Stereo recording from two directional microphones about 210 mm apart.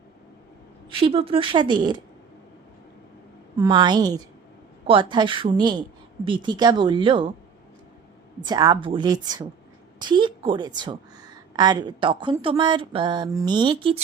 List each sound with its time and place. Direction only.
0.9 s a woman's voice: 25° right (ahead or behind)
3.6 s a woman's voice: 20° right (ahead or behind)
8.4 s a woman's voice: 20° right (ahead or behind)